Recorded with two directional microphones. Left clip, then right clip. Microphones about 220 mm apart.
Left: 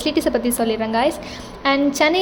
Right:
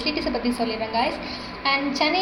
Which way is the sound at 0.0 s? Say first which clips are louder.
Left 6 dB; 55° left (ahead or behind).